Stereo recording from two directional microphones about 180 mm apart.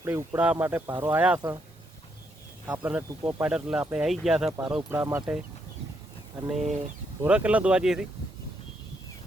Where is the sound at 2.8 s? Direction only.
10° right (ahead or behind).